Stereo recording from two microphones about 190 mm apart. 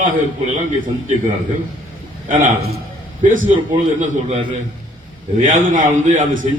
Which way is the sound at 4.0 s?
40° right (ahead or behind).